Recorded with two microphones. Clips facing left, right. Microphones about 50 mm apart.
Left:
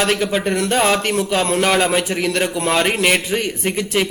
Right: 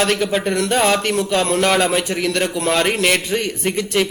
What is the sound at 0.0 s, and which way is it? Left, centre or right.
A man's voice, centre.